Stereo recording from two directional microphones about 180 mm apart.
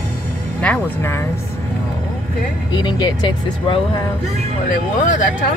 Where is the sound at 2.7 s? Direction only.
25° left (ahead or behind).